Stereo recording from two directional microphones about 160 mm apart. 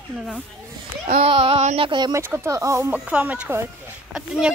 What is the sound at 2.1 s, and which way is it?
Speech, 15° right (ahead or behind).